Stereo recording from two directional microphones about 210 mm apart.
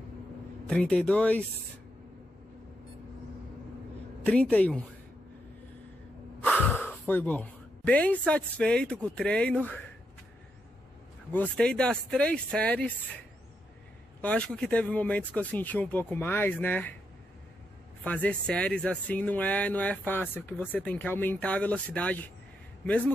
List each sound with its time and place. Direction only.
0.7 s speech: 5° left (ahead or behind)
4.2 s speech: 5° left (ahead or behind)
6.4 s speech: 5° left (ahead or behind)
11.3 s speech: 5° left (ahead or behind)
14.2 s speech: 5° left (ahead or behind)
18.0 s speech: 5° left (ahead or behind)